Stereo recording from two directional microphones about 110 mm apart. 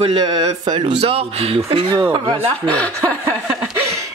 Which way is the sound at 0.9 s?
65° right (ahead or behind).